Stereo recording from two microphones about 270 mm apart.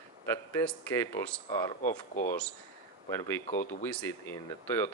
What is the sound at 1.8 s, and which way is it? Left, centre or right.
Speech, left.